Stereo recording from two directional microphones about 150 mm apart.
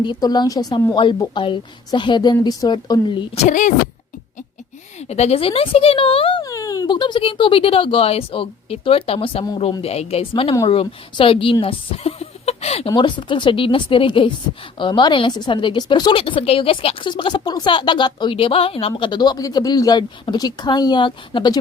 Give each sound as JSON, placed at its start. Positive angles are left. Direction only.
{"t": 0.0, "sound": "a woman's voice", "side_deg": 30}
{"t": 3.3, "sound": "speech", "side_deg": 55}
{"t": 4.9, "sound": "a woman's voice", "side_deg": 45}
{"t": 6.4, "sound": "speech", "side_deg": 20}
{"t": 9.8, "sound": "a woman's voice", "side_deg": 45}
{"t": 12.9, "sound": "a woman's voice", "side_deg": 30}